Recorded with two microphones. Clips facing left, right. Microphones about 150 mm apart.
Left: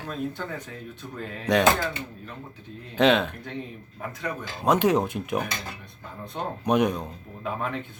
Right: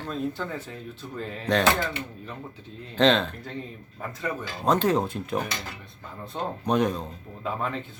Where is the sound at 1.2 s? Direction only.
5° left (ahead or behind).